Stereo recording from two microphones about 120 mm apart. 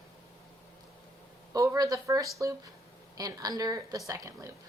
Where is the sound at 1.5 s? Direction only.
30° right (ahead or behind).